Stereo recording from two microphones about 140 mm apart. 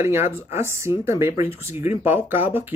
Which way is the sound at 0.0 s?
20° right (ahead or behind).